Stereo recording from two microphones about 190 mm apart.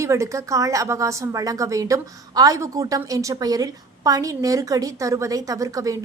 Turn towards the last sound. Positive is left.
turn(degrees=-15)  # may be behind; listen again after turning